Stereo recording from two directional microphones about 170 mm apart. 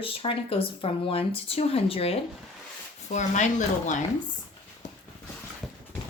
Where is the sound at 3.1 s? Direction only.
45° left (ahead or behind).